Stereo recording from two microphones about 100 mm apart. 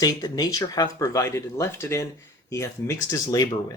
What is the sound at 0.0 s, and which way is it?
Speech, 40° left (ahead or behind).